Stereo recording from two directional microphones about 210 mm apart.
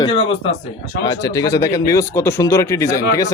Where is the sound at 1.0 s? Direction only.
20° left (ahead or behind).